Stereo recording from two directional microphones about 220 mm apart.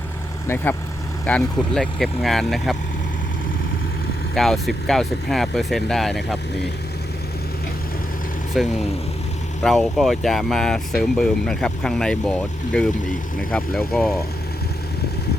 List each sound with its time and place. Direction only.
0.4 s speech: 10° left (ahead or behind)
4.4 s speech: centre (ahead or behind)
8.5 s speech: centre (ahead or behind)